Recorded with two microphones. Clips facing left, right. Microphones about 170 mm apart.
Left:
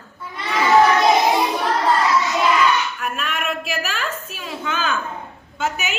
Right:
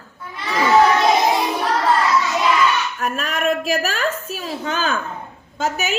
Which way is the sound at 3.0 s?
40° right (ahead or behind).